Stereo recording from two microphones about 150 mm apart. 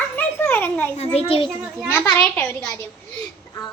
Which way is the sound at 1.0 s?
40° left (ahead or behind).